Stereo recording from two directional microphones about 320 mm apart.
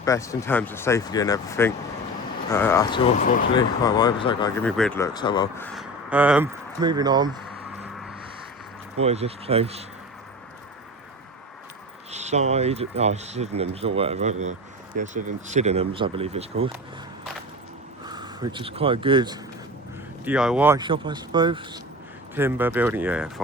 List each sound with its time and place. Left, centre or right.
0.0 s speech: centre
3.2 s speech: left
3.6 s speech: centre
9.0 s speech: centre
12.1 s speech: right
18.0 s speech: centre
20.2 s speech: centre